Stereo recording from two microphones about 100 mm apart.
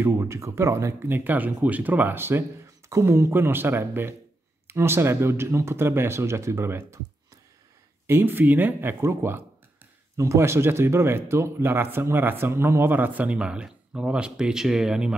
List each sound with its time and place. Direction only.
0.0 s speech: 30° right (ahead or behind)
8.1 s speech: 20° right (ahead or behind); by 15.1 s 5° right (ahead or behind)